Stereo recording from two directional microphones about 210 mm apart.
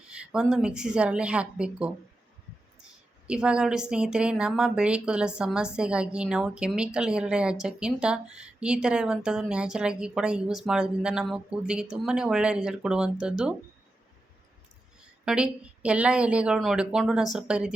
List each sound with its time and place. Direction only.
0.1 s a woman's voice: 5° right (ahead or behind)
3.2 s a woman's voice: 5° right (ahead or behind)
15.2 s a woman's voice: 5° right (ahead or behind)